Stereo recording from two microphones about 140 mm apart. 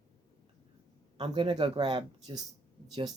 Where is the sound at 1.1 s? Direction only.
40° right (ahead or behind).